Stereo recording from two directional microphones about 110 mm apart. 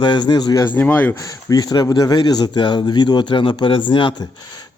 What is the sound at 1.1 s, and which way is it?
Speech, 30° left (ahead or behind).